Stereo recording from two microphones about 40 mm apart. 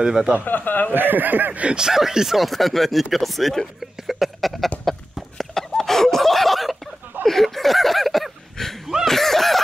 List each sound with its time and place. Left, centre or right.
0.0 s speech: centre
0.5 s speech: left
0.9 s speech: right
1.8 s speech: centre
4.1 s a sound: centre